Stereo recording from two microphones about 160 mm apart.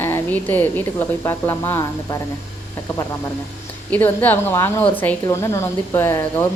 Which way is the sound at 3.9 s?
10° left (ahead or behind).